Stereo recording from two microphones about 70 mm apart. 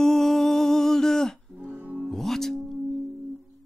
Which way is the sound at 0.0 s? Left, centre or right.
Centre.